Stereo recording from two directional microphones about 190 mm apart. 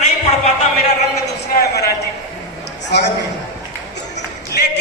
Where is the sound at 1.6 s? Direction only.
60° left (ahead or behind).